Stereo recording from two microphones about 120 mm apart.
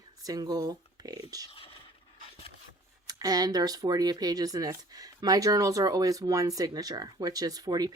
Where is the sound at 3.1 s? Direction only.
30° right (ahead or behind).